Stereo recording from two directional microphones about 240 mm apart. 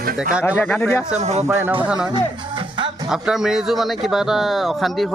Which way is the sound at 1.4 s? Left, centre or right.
Centre.